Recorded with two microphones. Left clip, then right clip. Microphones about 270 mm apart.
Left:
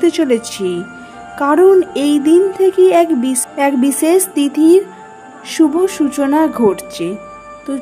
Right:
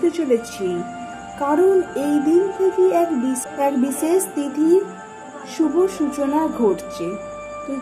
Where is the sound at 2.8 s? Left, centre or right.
Left.